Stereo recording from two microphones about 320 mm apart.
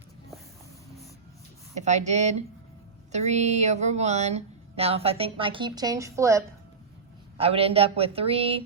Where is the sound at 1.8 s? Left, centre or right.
Right.